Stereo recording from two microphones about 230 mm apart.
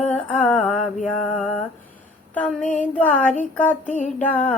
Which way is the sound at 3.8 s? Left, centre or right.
Left.